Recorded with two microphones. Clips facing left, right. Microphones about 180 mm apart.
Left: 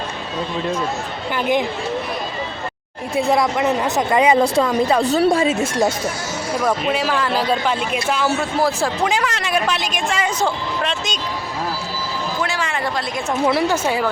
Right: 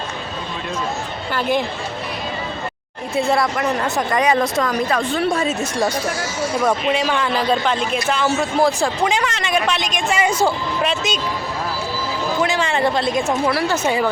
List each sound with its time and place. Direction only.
1.4 s speech: 15° left (ahead or behind)
3.2 s speech: 15° left (ahead or behind)
5.0 s speech: 40° left (ahead or behind)
6.7 s speech: 5° left (ahead or behind)
10.1 s speech: 10° right (ahead or behind)
12.4 s speech: 20° right (ahead or behind)
13.5 s speech: 20° left (ahead or behind)
13.8 s speech: 5° left (ahead or behind)